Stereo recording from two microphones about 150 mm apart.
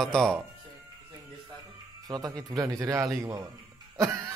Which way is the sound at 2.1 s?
25° right (ahead or behind).